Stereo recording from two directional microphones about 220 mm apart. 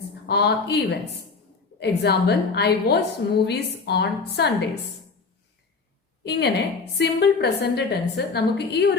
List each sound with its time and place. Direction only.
0.3 s a woman's voice: 45° left (ahead or behind)
6.2 s a woman's voice: 50° left (ahead or behind)